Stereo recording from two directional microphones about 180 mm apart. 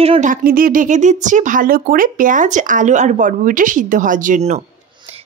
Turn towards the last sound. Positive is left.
turn(degrees=-40)  # may be behind; listen again after turning